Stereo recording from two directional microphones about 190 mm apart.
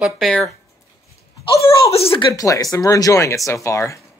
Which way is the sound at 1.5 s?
15° left (ahead or behind).